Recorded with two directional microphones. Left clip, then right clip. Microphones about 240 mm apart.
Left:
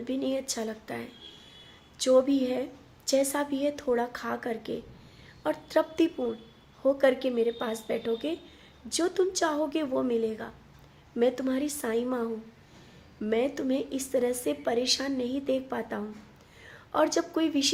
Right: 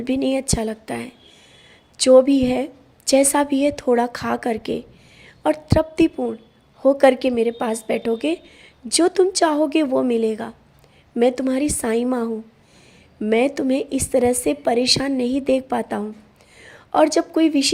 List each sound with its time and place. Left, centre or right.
0.0 s a woman's voice: right